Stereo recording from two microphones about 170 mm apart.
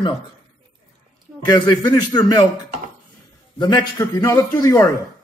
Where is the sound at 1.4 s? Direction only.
25° left (ahead or behind).